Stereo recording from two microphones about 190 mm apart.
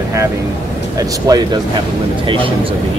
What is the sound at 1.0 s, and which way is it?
Speech, 20° right (ahead or behind).